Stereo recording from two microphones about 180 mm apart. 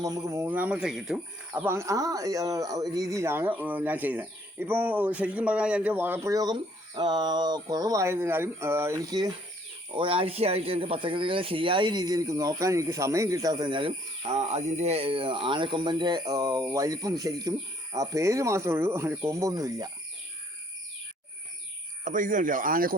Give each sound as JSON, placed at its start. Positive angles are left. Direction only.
{"t": 0.0, "sound": "speech", "side_deg": -15}
{"t": 22.0, "sound": "speech", "side_deg": -45}